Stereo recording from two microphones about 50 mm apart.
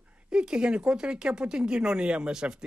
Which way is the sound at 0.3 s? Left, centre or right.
Centre.